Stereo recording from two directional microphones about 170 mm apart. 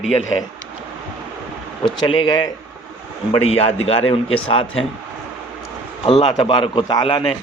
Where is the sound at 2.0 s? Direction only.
30° left (ahead or behind).